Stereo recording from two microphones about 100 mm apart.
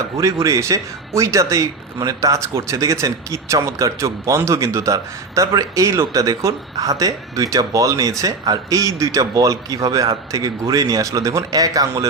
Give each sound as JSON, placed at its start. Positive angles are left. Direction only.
{"t": 0.0, "sound": "speech", "side_deg": -30}